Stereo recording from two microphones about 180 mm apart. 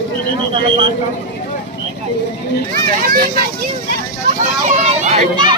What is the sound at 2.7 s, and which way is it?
Speech, 50° right (ahead or behind).